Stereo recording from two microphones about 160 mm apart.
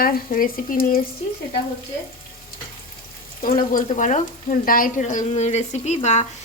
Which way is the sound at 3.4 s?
60° left (ahead or behind).